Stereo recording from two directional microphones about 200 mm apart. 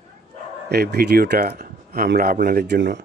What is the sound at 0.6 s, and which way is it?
Speech, 50° right (ahead or behind).